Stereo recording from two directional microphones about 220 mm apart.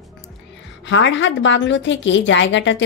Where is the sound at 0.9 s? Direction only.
55° left (ahead or behind).